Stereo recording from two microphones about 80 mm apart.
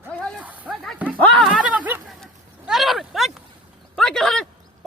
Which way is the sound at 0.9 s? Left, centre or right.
Centre.